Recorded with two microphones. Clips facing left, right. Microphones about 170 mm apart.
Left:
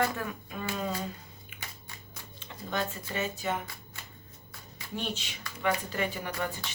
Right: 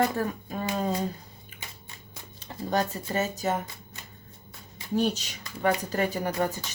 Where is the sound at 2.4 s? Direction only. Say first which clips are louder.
Right 6 dB; 40° right (ahead or behind).